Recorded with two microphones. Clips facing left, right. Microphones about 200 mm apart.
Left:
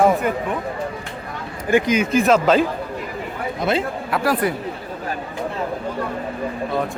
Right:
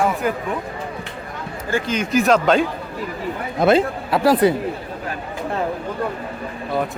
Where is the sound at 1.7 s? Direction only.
15° left (ahead or behind).